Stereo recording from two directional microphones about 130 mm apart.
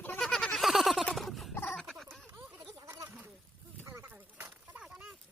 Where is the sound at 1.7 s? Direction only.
Centre (ahead or behind).